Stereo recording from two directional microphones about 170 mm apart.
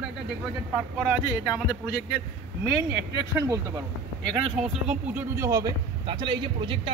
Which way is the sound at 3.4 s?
20° right (ahead or behind).